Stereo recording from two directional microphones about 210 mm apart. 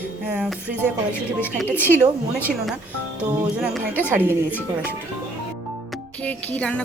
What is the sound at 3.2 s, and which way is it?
A woman's voice, 5° right (ahead or behind).